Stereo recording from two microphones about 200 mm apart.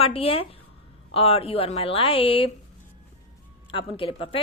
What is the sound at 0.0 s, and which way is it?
A woman's voice, 30° left (ahead or behind).